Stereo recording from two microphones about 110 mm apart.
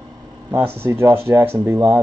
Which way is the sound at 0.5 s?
25° right (ahead or behind).